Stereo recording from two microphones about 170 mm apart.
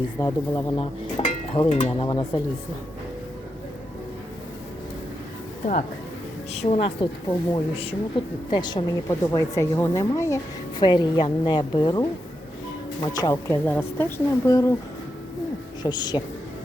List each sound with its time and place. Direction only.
0.2 s a woman's voice: 20° left (ahead or behind)
0.8 s speech: 35° left (ahead or behind)
6.5 s a woman's voice: 40° left (ahead or behind); by 14.7 s 20° left (ahead or behind)
15.8 s a woman's voice: 25° left (ahead or behind)